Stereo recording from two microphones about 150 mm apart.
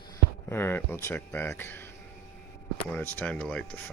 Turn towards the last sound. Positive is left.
turn(degrees=10)  # may be behind; listen again after turning